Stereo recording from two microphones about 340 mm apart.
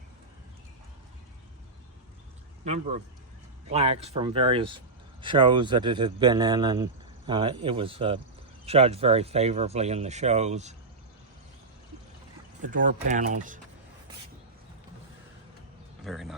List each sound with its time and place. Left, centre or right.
3.7 s speech: centre
12.6 s speech: right
16.0 s speech: centre